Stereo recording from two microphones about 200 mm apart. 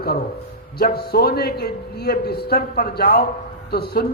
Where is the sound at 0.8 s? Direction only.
50° left (ahead or behind).